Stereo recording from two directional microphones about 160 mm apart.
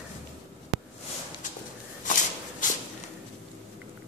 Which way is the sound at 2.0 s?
55° left (ahead or behind).